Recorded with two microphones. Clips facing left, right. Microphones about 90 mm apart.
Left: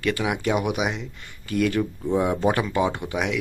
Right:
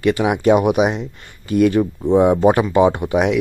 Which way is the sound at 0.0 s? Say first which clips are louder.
Right 8 dB; 20° right (ahead or behind).